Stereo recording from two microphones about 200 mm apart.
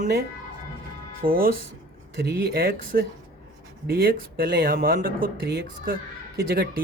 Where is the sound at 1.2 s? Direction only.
45° right (ahead or behind).